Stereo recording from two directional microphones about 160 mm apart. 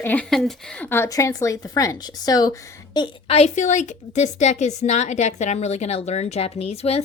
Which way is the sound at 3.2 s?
40° left (ahead or behind).